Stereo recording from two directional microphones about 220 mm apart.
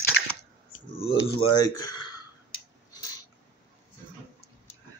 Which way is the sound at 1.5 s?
15° left (ahead or behind).